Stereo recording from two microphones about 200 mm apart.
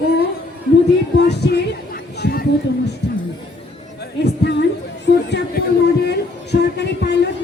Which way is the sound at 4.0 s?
60° left (ahead or behind).